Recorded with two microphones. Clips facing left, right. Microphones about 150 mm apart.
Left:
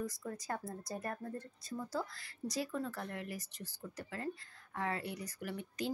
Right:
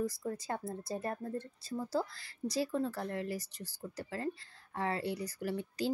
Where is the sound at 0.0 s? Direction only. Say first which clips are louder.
Right 5 dB; 30° right (ahead or behind).